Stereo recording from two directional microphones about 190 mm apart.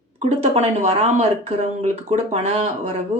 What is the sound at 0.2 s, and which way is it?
Speech, 30° right (ahead or behind).